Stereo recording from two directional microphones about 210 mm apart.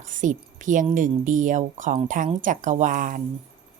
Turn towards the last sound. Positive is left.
turn(degrees=-40)  # may be behind; listen again after turning